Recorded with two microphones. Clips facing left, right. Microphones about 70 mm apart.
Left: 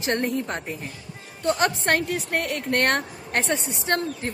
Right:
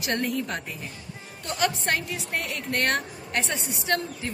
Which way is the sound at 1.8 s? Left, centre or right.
Left.